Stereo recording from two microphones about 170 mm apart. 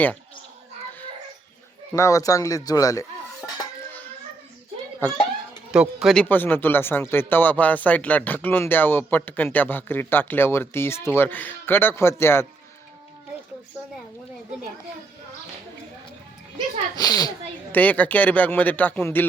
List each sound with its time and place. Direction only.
1.9 s speech: 20° left (ahead or behind)
4.9 s a child's voice: 10° left (ahead or behind)
5.7 s speech: 5° right (ahead or behind); by 12.5 s 15° left (ahead or behind)
16.9 s speech: 25° left (ahead or behind)
17.7 s speech: 10° left (ahead or behind)